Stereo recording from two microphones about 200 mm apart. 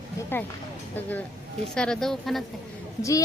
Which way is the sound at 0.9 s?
10° left (ahead or behind).